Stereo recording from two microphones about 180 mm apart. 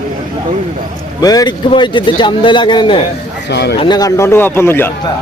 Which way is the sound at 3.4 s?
70° left (ahead or behind).